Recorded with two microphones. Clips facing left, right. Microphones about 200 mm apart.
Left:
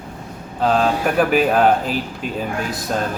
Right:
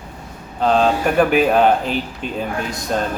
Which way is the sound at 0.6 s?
5° left (ahead or behind).